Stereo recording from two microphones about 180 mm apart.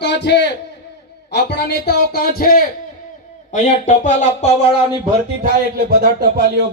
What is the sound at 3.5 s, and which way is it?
Speech, 40° left (ahead or behind).